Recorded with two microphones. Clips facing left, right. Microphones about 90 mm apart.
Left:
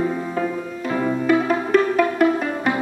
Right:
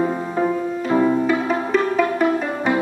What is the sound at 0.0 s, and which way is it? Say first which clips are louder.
Music: right 2 dB; 20° right (ahead or behind).